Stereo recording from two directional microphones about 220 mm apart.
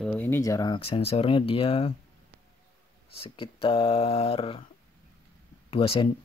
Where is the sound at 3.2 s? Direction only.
25° left (ahead or behind).